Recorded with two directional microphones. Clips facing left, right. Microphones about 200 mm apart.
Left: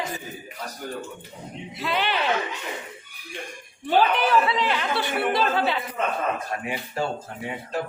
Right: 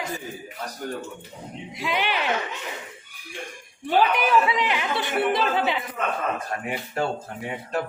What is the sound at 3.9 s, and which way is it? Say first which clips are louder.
A woman's voice: even; 15° right (ahead or behind).